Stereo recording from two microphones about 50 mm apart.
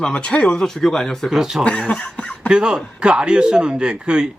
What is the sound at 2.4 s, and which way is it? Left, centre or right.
A man's voice, centre.